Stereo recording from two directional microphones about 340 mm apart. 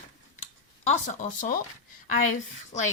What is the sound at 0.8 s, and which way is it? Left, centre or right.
Speech, left.